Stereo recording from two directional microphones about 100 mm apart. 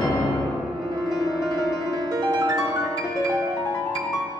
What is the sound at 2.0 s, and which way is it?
Music, 35° right (ahead or behind).